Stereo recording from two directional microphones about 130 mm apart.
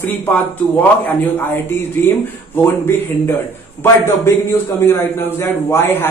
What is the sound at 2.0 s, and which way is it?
A man's voice, 20° left (ahead or behind).